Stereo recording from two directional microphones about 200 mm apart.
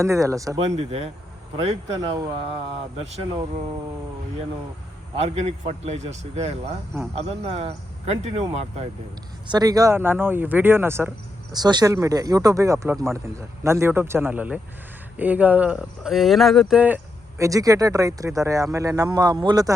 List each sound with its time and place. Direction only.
0.0 s speech: 15° right (ahead or behind)
0.6 s speech: 30° right (ahead or behind)
1.9 s speech: 15° right (ahead or behind)
5.1 s speech: 30° right (ahead or behind)
9.5 s speech: 20° right (ahead or behind)